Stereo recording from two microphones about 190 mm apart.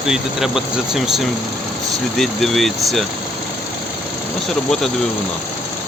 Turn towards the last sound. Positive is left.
turn(degrees=0)  # may be behind; listen again after turning